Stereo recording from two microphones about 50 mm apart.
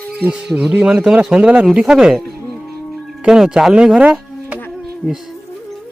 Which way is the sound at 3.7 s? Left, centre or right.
Right.